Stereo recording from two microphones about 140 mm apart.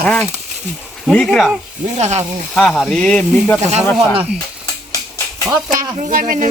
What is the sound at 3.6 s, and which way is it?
Speech, 50° right (ahead or behind).